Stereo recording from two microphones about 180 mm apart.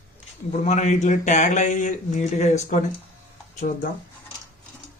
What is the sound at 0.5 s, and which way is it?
Speech, 40° left (ahead or behind).